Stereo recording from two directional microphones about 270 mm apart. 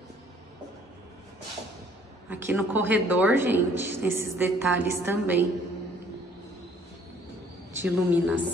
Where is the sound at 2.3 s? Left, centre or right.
Centre.